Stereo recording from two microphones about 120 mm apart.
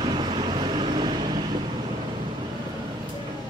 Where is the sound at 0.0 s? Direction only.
40° right (ahead or behind).